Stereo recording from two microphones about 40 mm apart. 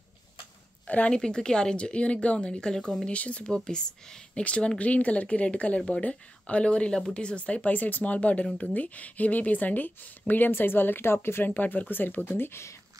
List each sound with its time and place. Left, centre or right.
0.8 s speech: left
1.1 s a woman's voice: centre
2.7 s speech: centre
3.1 s speech: left
3.4 s a woman's voice: left
7.7 s speech: left
11.4 s speech: left